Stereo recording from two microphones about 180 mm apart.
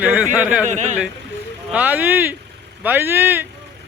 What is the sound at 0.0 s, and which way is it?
Speech, 5° right (ahead or behind).